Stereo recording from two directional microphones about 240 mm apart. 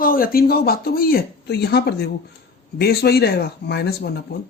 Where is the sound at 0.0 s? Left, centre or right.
Left.